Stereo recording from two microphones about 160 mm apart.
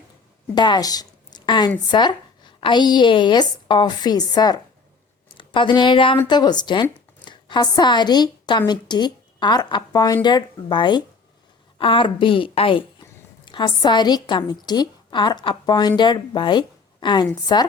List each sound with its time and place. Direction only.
0.5 s a woman's voice: 25° left (ahead or behind)